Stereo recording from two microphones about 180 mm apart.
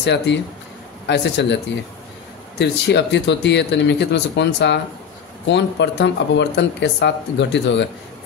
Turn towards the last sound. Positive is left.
turn(degrees=80)